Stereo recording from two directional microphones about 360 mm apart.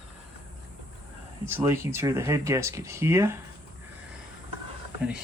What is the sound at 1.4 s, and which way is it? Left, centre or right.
Speech, centre.